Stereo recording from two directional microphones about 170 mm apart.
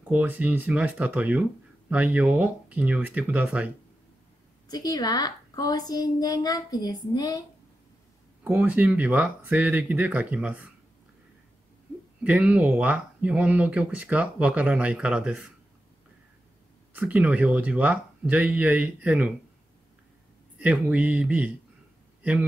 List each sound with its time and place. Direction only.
0.0 s speech: 10° right (ahead or behind)
4.6 s a woman's voice: 20° left (ahead or behind)
8.5 s speech: 10° right (ahead or behind)
12.2 s speech: 10° right (ahead or behind)
16.9 s speech: 10° right (ahead or behind)
20.5 s speech: 5° right (ahead or behind)